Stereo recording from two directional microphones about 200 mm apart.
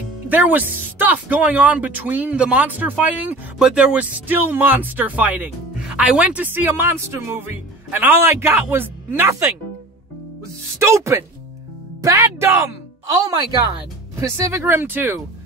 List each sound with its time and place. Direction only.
0.3 s speech: 10° right (ahead or behind)
10.8 s a woman's voice: 15° right (ahead or behind)